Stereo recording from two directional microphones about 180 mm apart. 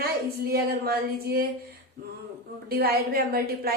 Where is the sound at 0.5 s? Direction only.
60° right (ahead or behind).